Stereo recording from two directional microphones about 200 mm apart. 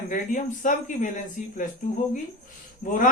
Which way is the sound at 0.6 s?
40° left (ahead or behind).